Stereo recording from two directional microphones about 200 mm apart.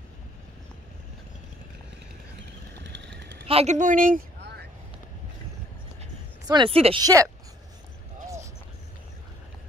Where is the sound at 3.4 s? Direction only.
30° right (ahead or behind).